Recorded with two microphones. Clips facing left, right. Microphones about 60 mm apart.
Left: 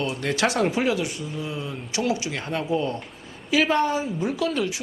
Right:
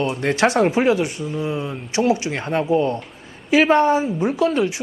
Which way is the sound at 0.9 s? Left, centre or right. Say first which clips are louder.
Right 6 dB; right.